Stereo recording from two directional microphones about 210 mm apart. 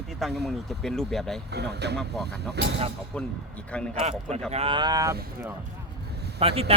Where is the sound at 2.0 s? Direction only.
5° left (ahead or behind).